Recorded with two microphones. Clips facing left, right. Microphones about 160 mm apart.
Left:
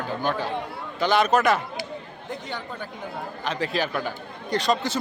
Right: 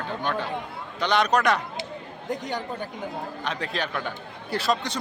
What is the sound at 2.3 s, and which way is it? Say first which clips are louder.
Speech: right 3 dB; 40° right (ahead or behind).